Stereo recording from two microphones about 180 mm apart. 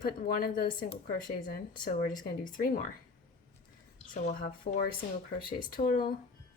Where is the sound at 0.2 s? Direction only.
55° left (ahead or behind).